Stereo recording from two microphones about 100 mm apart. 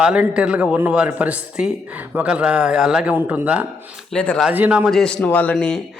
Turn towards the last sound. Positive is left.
turn(degrees=5)  # may be behind; listen again after turning